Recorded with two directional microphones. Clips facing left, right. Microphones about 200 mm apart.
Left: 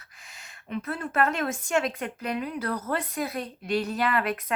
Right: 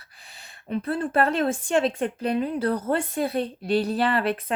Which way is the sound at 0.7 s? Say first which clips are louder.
Right 6 dB; 30° right (ahead or behind).